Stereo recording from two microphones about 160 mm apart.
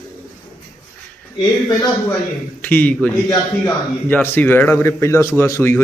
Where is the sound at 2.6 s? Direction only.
10° left (ahead or behind).